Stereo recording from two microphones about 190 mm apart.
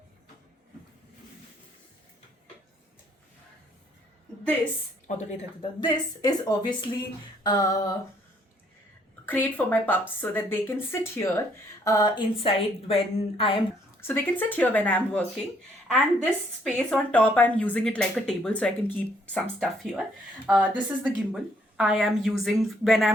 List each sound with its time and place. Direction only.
5.0 s speech: 40° left (ahead or behind)
5.8 s a woman's voice: 20° left (ahead or behind)
9.2 s speech: 10° left (ahead or behind); by 13.6 s 30° left (ahead or behind)
14.1 s a woman's voice: 10° left (ahead or behind)